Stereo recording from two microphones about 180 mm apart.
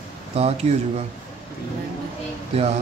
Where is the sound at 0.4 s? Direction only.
35° right (ahead or behind).